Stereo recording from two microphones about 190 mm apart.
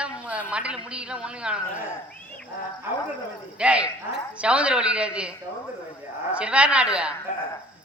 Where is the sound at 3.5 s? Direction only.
5° right (ahead or behind).